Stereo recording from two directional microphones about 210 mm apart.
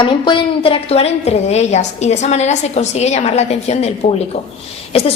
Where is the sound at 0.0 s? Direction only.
25° left (ahead or behind).